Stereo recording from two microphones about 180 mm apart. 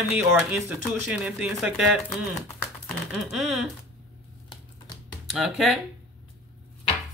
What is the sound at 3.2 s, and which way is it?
Speech, 5° right (ahead or behind).